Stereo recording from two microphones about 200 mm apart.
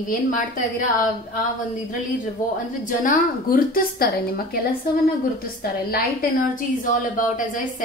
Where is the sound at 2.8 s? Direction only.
40° left (ahead or behind).